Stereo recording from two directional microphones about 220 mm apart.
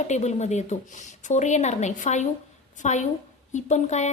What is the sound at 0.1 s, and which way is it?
A woman's voice, 30° left (ahead or behind).